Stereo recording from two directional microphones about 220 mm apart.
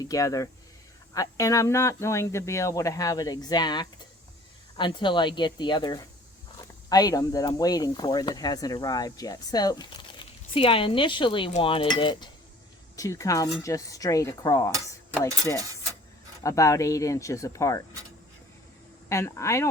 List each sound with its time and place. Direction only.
0.0 s speech: 15° left (ahead or behind)
16.4 s speech: 15° left (ahead or behind)
19.0 s speech: 15° left (ahead or behind)